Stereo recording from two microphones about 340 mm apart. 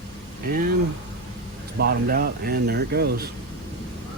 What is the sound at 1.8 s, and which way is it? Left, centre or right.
Speech, right.